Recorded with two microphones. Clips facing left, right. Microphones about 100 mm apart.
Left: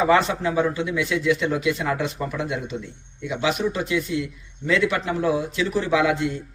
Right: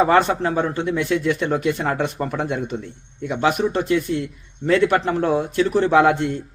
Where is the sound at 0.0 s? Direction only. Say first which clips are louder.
Right 3 dB; 50° right (ahead or behind).